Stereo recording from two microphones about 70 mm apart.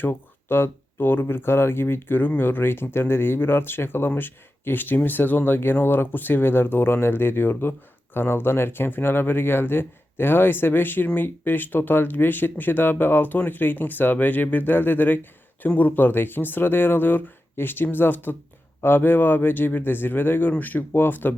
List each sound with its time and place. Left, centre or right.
0.0 s speech: left